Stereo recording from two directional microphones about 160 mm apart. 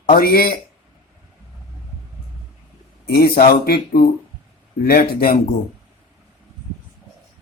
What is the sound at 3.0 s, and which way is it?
Speech, 80° left.